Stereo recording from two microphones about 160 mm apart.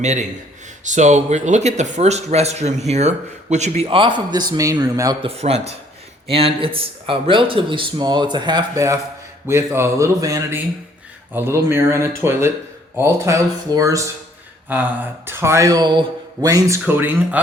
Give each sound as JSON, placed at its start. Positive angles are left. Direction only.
{"t": 0.0, "sound": "speech", "side_deg": -45}
{"t": 3.8, "sound": "speech", "side_deg": -30}
{"t": 5.2, "sound": "speech", "side_deg": -40}